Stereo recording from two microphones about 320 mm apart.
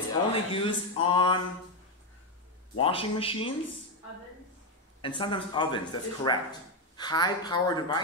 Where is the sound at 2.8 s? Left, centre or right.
Centre.